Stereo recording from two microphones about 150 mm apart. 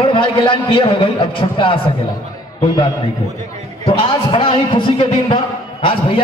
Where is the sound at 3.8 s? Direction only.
35° left (ahead or behind).